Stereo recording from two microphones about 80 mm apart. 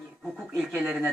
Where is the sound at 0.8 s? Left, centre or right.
Right.